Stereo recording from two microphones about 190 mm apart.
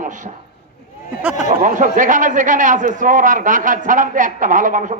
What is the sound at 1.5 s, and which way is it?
A man's voice, 45° right (ahead or behind).